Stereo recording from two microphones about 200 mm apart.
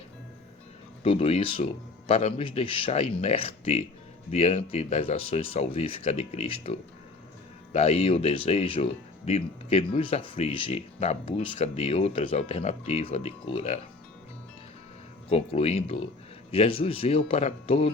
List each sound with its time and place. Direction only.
1.0 s speech: 30° left (ahead or behind)
15.3 s speech: 30° left (ahead or behind)